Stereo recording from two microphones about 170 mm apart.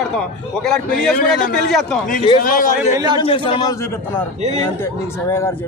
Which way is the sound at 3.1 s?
30° left (ahead or behind).